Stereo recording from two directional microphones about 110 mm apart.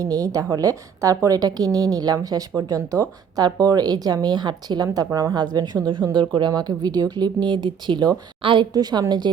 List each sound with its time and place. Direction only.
0.0 s speech: 30° right (ahead or behind); by 8.6 s 50° right (ahead or behind)
8.7 s speech: 40° right (ahead or behind)